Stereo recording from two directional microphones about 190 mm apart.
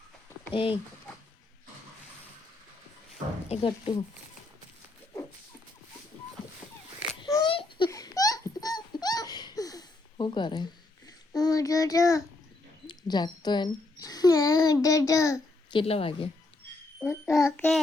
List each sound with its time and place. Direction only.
0.5 s speech: 25° left (ahead or behind)
3.5 s speech: 30° left (ahead or behind)
7.2 s a sound: 20° left (ahead or behind)
12.9 s a child's voice: 20° left (ahead or behind)
17.0 s a child's voice: 15° left (ahead or behind)